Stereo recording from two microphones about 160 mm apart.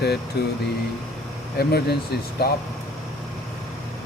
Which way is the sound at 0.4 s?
90° left.